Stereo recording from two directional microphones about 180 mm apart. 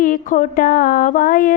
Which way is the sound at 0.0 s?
50° left (ahead or behind).